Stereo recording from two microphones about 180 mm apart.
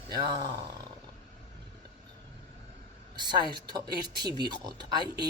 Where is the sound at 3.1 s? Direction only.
25° right (ahead or behind).